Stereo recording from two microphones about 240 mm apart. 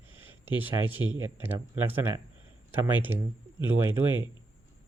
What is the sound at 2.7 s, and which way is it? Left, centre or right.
Speech, centre.